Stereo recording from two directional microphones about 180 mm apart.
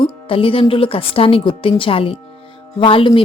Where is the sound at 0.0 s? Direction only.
30° left (ahead or behind).